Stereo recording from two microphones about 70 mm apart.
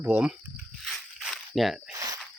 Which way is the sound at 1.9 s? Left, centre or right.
Right.